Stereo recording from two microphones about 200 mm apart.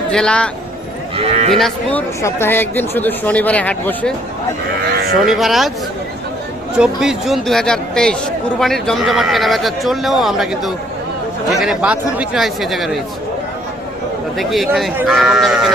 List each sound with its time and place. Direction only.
0.1 s speech: 5° left (ahead or behind)
1.1 s speech: 30° right (ahead or behind)
1.5 s speech: 5° left (ahead or behind)
5.2 s speech: centre (ahead or behind)
6.7 s speech: 5° right (ahead or behind)
14.3 s speech: centre (ahead or behind)